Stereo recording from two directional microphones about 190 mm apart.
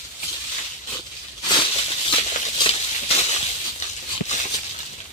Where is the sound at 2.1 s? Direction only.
30° left (ahead or behind).